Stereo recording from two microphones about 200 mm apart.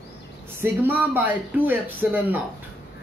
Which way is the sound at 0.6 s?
10° right (ahead or behind).